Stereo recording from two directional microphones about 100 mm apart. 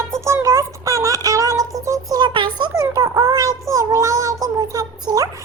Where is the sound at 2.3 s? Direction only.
55° right (ahead or behind).